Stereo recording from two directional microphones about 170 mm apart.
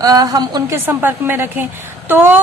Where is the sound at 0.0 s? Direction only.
20° right (ahead or behind).